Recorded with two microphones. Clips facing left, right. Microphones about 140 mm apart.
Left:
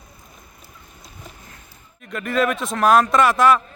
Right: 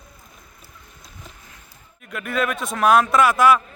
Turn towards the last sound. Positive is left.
turn(degrees=-5)  # may be behind; listen again after turning